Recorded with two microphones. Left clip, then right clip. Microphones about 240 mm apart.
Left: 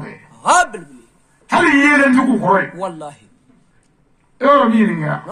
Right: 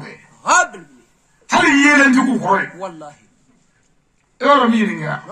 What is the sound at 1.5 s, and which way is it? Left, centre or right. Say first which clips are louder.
A man's voice: even; right.